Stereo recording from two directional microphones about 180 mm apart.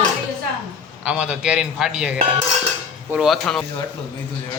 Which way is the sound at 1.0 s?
5° right (ahead or behind).